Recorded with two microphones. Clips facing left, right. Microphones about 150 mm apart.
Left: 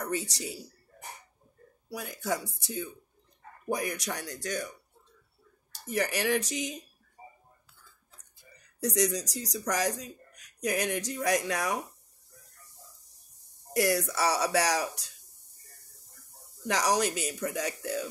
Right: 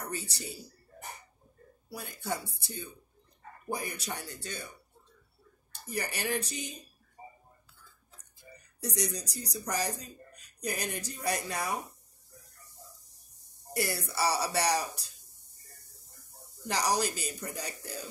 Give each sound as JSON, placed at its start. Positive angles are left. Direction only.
{"t": 0.1, "sound": "speech", "side_deg": 90}
{"t": 1.9, "sound": "speech", "side_deg": 90}
{"t": 8.7, "sound": "speech", "side_deg": 90}
{"t": 13.7, "sound": "speech", "side_deg": 90}
{"t": 16.6, "sound": "speech", "side_deg": 90}